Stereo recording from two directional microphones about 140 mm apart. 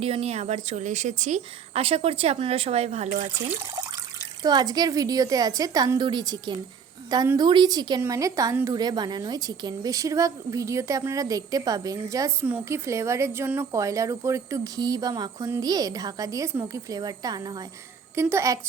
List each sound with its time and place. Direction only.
0.0 s a woman's voice: 45° right (ahead or behind)
4.4 s speech: 30° right (ahead or behind)
18.1 s speech: 20° right (ahead or behind)